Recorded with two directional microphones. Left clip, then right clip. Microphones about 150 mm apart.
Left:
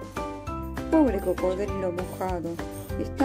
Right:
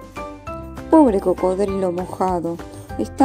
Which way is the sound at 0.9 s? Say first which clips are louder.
Right 9 dB; 30° right (ahead or behind).